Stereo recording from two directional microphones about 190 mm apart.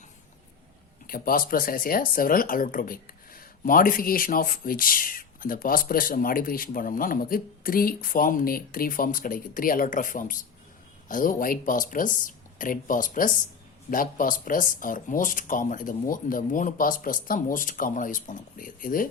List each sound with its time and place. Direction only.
1.0 s speech: 50° left (ahead or behind)